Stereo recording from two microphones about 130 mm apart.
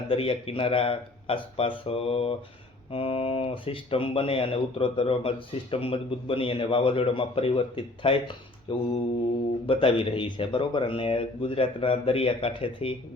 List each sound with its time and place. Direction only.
0.1 s speech: 45° left (ahead or behind)
8.7 s mantra: 40° left (ahead or behind)
9.6 s speech: 45° left (ahead or behind)